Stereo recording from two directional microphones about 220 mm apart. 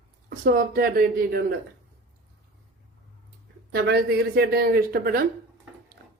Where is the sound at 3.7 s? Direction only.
45° right (ahead or behind).